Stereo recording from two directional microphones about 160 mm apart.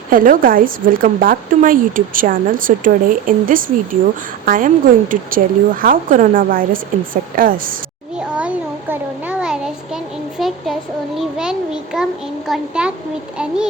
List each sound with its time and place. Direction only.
0.1 s speech: 60° right (ahead or behind)
8.3 s a sound: 10° right (ahead or behind)
12.5 s a child's voice: 5° right (ahead or behind)